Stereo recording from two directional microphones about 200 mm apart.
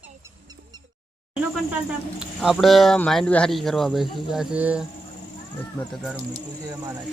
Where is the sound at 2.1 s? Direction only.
5° right (ahead or behind).